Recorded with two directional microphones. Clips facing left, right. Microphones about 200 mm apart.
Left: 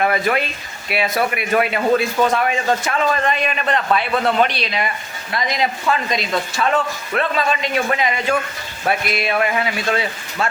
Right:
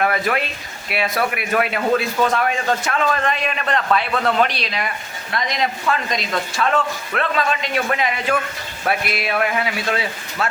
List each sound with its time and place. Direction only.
0.0 s speech: centre (ahead or behind)